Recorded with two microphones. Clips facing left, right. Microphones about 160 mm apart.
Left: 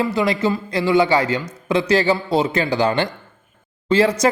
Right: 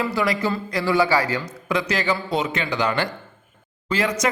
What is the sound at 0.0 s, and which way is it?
Speech, 25° left (ahead or behind).